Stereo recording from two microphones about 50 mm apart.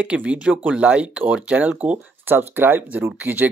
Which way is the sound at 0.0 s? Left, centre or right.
Right.